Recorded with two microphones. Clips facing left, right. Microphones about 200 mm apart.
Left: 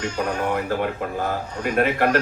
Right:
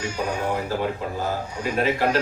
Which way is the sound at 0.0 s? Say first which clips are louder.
Left 2 dB; 10° right (ahead or behind).